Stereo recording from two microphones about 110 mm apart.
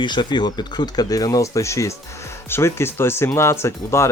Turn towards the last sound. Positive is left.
turn(degrees=25)  # may be behind; listen again after turning